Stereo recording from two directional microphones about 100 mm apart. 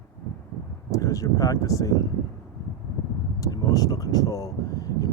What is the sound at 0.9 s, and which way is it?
Speech, 35° left (ahead or behind).